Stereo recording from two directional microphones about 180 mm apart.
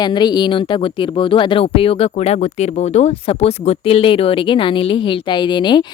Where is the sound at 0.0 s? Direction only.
25° left (ahead or behind).